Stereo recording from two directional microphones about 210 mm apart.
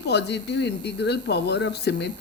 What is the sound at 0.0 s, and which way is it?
Speech, 55° left (ahead or behind).